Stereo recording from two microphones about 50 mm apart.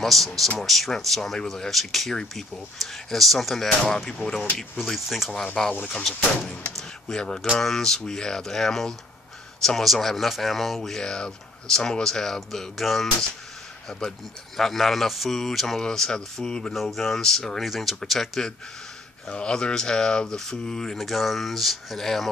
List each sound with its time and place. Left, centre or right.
0.0 s speech: centre
5.3 s speech: centre
7.2 s speech: centre
13.8 s speech: centre
14.6 s speech: centre
16.7 s speech: centre
19.2 s speech: centre
21.0 s speech: centre